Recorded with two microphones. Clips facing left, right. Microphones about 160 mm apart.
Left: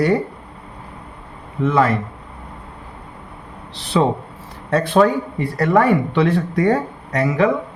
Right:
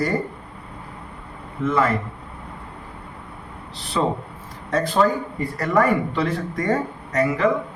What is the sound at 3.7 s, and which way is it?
Speech, 70° left (ahead or behind).